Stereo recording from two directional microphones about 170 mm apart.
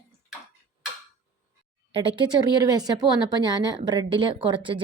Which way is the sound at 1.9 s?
30° right (ahead or behind).